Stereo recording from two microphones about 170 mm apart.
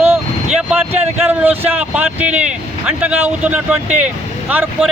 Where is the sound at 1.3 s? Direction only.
10° right (ahead or behind).